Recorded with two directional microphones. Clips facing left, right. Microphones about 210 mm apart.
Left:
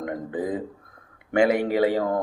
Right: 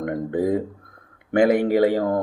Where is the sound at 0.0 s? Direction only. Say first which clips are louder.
Right 5 dB; 55° right (ahead or behind).